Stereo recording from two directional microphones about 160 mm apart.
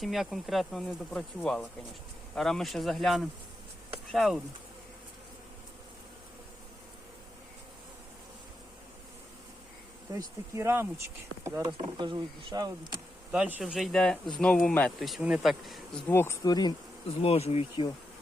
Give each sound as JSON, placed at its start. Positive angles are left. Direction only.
{"t": 0.0, "sound": "speech", "side_deg": 0}
{"t": 10.1, "sound": "speech", "side_deg": -20}
{"t": 11.6, "sound": "speech", "side_deg": -30}
{"t": 13.3, "sound": "speech", "side_deg": -5}
{"t": 16.0, "sound": "speech", "side_deg": 15}
{"t": 17.2, "sound": "speech", "side_deg": 40}